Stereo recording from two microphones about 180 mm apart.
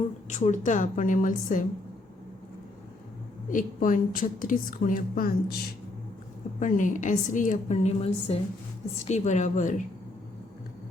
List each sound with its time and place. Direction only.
0.3 s a woman's voice: 40° left (ahead or behind)
3.5 s a woman's voice: 45° left (ahead or behind)
6.6 s a woman's voice: 45° left (ahead or behind)